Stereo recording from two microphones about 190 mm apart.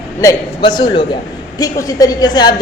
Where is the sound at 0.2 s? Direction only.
20° left (ahead or behind).